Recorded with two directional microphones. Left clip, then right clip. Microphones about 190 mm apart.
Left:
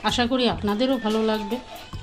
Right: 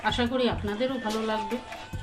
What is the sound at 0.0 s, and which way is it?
Speech, 50° left (ahead or behind).